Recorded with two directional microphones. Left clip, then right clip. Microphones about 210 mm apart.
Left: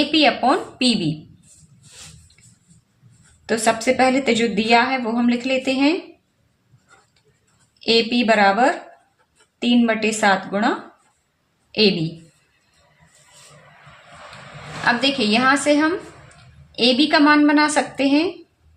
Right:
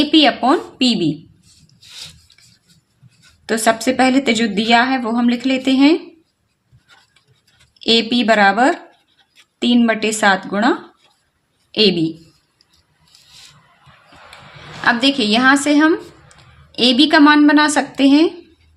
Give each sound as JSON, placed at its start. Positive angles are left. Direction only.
{"t": 0.1, "sound": "a woman's voice", "side_deg": -35}
{"t": 3.4, "sound": "a woman's voice", "side_deg": -40}
{"t": 7.9, "sound": "a woman's voice", "side_deg": -35}
{"t": 14.8, "sound": "a woman's voice", "side_deg": -40}